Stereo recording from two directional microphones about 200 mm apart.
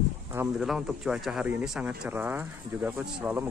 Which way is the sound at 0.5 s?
Centre (ahead or behind).